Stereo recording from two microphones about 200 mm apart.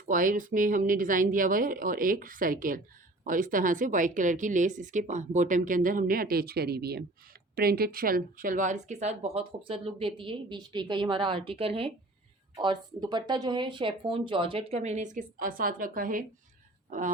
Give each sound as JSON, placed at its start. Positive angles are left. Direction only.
{"t": 0.0, "sound": "a woman's voice", "side_deg": -45}